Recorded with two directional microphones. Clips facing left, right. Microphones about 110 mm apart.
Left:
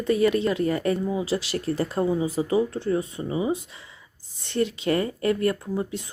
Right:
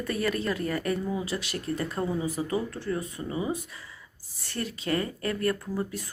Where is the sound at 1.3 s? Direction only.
30° left (ahead or behind).